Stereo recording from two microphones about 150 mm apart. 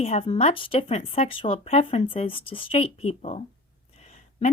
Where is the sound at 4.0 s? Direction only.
45° left (ahead or behind).